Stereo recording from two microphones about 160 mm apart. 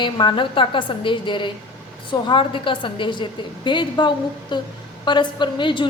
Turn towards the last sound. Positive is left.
turn(degrees=30)  # may be behind; listen again after turning